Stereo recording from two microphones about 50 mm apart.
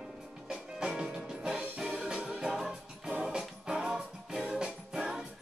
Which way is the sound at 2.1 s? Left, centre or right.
Right.